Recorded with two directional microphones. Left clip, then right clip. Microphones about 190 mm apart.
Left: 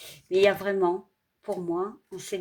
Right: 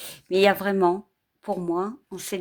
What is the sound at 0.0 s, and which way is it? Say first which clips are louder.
Speech: right 2 dB; 35° right (ahead or behind).